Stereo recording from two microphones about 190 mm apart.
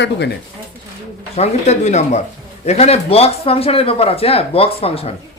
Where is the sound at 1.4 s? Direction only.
35° left (ahead or behind).